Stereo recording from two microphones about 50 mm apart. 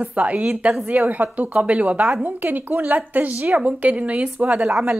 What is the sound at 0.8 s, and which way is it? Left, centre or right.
A woman's voice, right.